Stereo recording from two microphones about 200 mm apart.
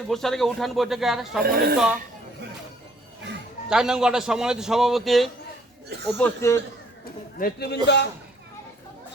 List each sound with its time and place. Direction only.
0.1 s a man's voice: centre (ahead or behind)
1.5 s speech: 50° right (ahead or behind)
3.7 s a man's voice: 5° right (ahead or behind)
7.0 s a man's voice: 50° left (ahead or behind)